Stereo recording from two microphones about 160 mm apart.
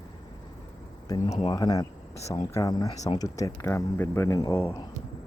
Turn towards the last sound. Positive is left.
turn(degrees=20)  # may be behind; listen again after turning